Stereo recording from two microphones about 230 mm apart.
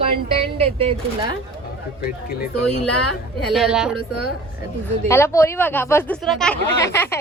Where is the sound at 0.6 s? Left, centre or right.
Right.